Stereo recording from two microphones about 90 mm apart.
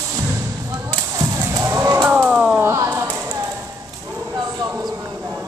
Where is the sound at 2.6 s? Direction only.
30° right (ahead or behind).